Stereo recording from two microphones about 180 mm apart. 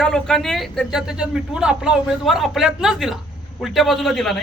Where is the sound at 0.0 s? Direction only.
5° left (ahead or behind).